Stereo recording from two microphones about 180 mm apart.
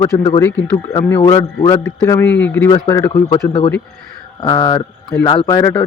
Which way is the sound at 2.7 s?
20° left (ahead or behind).